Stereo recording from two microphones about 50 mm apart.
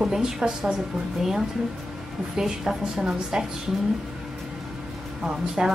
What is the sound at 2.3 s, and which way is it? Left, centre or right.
Speech, centre.